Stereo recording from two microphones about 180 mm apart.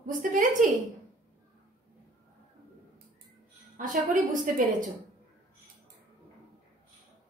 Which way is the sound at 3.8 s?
45° right (ahead or behind).